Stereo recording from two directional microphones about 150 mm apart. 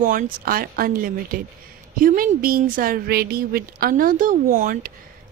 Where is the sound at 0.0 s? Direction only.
65° right (ahead or behind).